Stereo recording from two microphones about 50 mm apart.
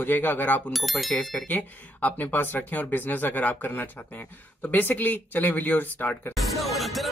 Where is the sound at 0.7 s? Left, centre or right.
Centre.